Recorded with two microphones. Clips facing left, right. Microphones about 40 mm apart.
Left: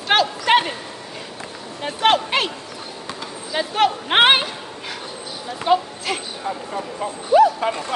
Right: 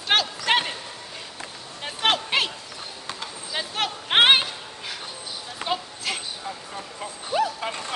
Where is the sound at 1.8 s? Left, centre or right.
Centre.